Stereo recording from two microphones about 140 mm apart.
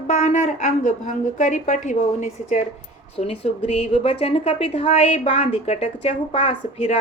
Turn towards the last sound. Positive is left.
turn(degrees=45)  # may be behind; listen again after turning